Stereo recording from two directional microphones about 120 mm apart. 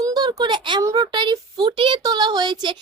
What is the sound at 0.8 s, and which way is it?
A woman's voice, 30° right (ahead or behind).